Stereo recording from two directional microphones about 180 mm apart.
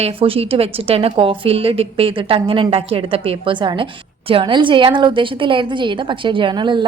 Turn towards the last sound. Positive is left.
turn(degrees=-25)  # may be behind; listen again after turning